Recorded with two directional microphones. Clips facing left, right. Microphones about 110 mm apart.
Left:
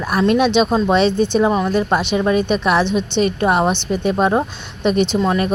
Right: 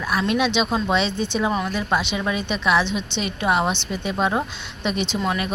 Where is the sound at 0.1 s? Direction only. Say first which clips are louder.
Left 7 dB; 45° left (ahead or behind).